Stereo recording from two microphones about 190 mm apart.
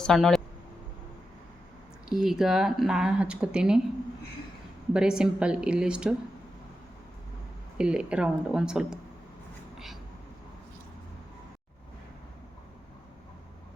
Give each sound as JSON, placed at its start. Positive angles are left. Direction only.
{"t": 0.0, "sound": "speech", "side_deg": 0}
{"t": 2.0, "sound": "speech", "side_deg": 0}
{"t": 4.9, "sound": "speech", "side_deg": -5}
{"t": 7.8, "sound": "speech", "side_deg": -5}
{"t": 9.7, "sound": "a sound", "side_deg": 0}